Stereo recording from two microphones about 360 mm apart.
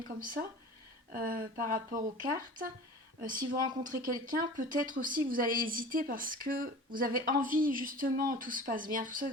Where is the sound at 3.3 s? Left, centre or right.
Centre.